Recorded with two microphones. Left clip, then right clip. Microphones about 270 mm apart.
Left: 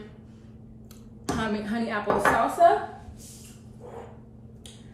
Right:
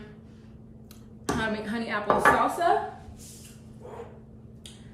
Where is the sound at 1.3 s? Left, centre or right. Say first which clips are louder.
Even; centre.